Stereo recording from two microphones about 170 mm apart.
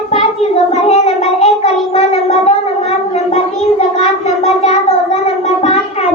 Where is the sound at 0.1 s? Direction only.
40° left (ahead or behind).